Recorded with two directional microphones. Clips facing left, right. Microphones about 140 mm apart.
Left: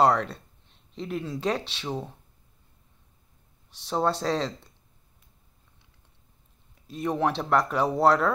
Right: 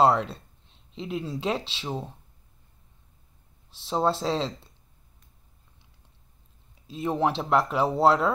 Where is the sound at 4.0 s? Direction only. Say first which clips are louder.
Even; 5° right (ahead or behind).